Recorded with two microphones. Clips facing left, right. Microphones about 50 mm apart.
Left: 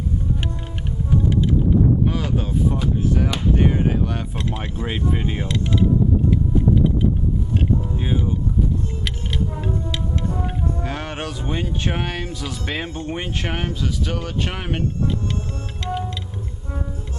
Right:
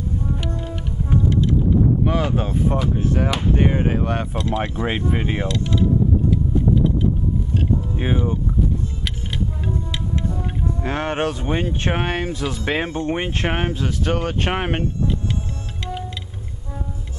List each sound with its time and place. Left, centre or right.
2.0 s speech: right
5.5 s speech: centre
6.3 s boat: centre
10.8 s speech: right